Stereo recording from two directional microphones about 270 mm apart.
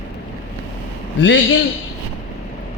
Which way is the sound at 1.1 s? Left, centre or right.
Left.